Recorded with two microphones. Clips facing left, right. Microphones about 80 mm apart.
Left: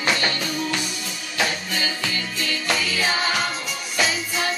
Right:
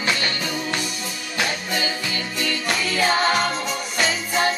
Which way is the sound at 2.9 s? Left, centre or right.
Right.